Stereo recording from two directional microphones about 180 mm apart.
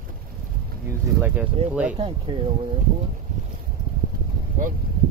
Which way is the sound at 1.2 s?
5° right (ahead or behind).